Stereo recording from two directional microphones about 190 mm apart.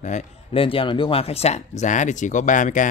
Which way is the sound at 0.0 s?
35° left (ahead or behind).